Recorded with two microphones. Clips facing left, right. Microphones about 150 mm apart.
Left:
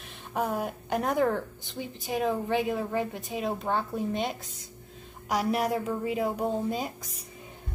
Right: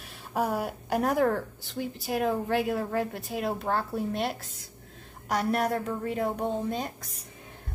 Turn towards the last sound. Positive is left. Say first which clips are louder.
# even
turn(degrees=5)  # may be behind; listen again after turning